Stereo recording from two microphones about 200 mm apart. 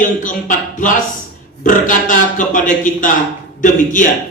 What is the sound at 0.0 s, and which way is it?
Speech, 40° left (ahead or behind).